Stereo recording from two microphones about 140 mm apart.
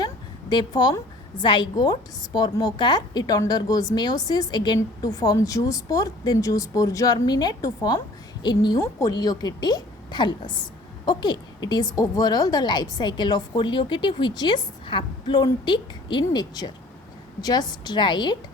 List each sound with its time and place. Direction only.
0.5 s a woman's voice: 30° left (ahead or behind)